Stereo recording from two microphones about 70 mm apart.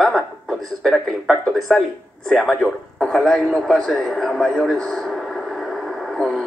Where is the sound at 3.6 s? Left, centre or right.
Centre.